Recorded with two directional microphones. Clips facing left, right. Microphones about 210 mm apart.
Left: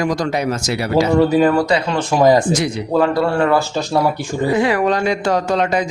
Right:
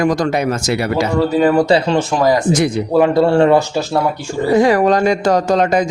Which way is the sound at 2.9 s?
20° right (ahead or behind).